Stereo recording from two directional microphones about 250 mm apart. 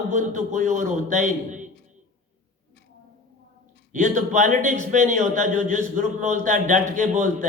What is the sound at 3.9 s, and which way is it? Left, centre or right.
A man's voice, right.